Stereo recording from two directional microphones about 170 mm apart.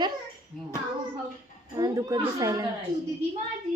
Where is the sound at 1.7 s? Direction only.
20° right (ahead or behind).